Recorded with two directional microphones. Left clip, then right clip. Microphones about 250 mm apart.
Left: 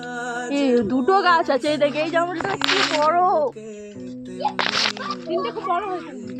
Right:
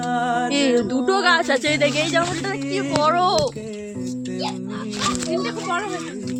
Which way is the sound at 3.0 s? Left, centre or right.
Right.